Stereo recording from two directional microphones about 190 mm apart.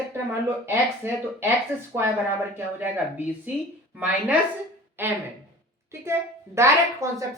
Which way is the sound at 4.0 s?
10° right (ahead or behind).